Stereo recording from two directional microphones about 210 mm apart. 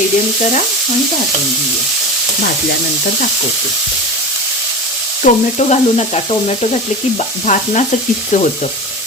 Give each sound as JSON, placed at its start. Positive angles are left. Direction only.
{"t": 5.2, "sound": "frying", "side_deg": 35}
{"t": 7.4, "sound": "frying", "side_deg": 35}